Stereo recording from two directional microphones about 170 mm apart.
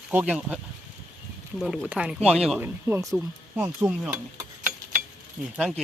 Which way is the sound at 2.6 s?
15° right (ahead or behind).